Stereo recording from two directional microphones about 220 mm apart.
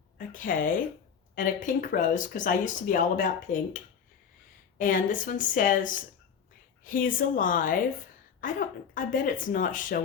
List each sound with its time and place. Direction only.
0.2 s a woman's voice: 40° left (ahead or behind)
4.8 s speech: 35° left (ahead or behind)
6.8 s speech: 40° left (ahead or behind)